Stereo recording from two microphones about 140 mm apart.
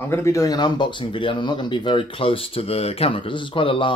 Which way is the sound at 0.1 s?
20° left (ahead or behind).